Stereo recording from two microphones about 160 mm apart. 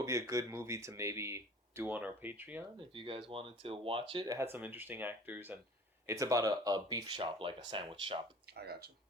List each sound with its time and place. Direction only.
0.0 s speech: 20° right (ahead or behind)
2.7 s speech: 35° right (ahead or behind)
4.5 s speech: 10° right (ahead or behind); by 8.2 s 35° right (ahead or behind)
8.4 s speech: 85° right